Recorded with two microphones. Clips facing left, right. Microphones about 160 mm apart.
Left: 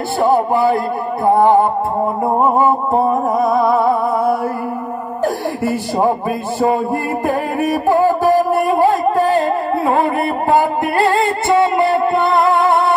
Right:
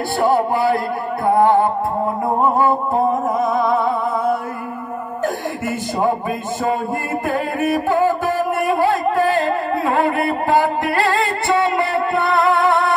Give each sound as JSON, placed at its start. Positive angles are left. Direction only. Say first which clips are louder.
{"t": 0.2, "sound": "music", "louder": "left 3 dB", "side_deg": 20}
{"t": 2.6, "sound": "music", "louder": "left 2 dB", "side_deg": 30}
{"t": 7.5, "sound": "music", "louder": "left 3 dB", "side_deg": 35}